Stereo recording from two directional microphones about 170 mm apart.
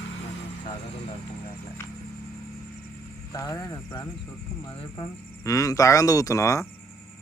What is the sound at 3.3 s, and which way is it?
Speech, 20° left (ahead or behind).